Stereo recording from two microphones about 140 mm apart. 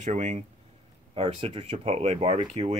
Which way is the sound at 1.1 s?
45° right (ahead or behind).